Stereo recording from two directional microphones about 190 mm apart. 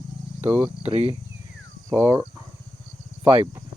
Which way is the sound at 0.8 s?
35° right (ahead or behind).